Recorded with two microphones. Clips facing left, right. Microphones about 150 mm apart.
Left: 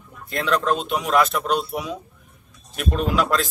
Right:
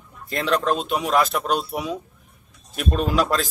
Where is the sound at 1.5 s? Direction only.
Centre (ahead or behind).